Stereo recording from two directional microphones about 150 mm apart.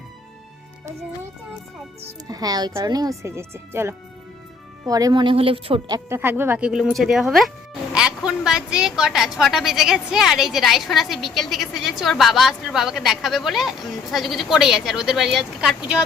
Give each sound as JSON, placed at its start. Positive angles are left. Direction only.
{"t": 2.3, "sound": "speech", "side_deg": -25}
{"t": 5.9, "sound": "speech", "side_deg": -15}